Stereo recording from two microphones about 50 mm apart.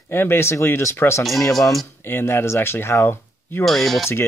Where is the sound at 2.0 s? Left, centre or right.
Left.